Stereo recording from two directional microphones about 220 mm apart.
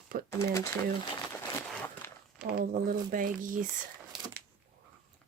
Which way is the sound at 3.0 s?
40° right (ahead or behind).